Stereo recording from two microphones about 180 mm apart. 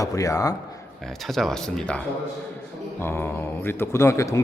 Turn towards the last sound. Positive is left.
turn(degrees=15)  # may be behind; listen again after turning